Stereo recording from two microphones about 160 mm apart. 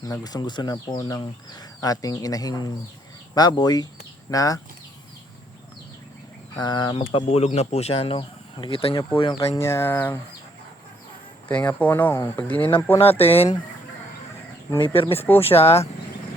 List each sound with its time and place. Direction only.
0.0 s speech: 25° left (ahead or behind)
6.6 s speech: 25° left (ahead or behind)
9.6 s speech: 15° left (ahead or behind)
11.4 s speech: 10° left (ahead or behind)
13.1 s speech: 40° left (ahead or behind)
14.8 s speech: 30° left (ahead or behind)